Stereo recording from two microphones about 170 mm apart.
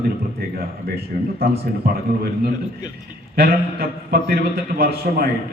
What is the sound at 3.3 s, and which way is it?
Speech, 60° right (ahead or behind).